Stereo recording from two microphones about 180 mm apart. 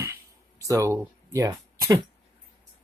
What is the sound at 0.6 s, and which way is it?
Speech, 15° right (ahead or behind).